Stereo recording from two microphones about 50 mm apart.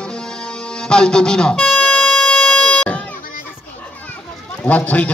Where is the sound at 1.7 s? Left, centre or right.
Centre.